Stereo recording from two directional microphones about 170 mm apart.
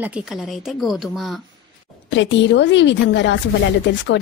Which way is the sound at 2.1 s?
90° left.